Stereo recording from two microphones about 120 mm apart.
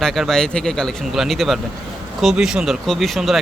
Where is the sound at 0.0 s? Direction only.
Centre (ahead or behind).